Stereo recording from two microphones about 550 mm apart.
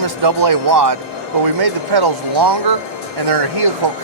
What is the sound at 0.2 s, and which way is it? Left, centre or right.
Speech, right.